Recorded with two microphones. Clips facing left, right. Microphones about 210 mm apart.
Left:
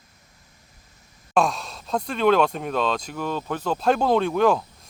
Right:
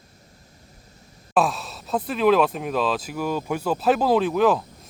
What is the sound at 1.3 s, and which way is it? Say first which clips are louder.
Speech: even; 5° right (ahead or behind).